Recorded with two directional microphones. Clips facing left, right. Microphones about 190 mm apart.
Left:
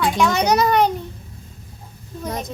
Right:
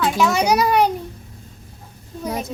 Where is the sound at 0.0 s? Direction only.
5° right (ahead or behind).